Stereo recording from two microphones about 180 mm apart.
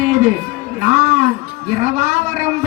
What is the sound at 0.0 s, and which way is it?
Music, 40° right (ahead or behind).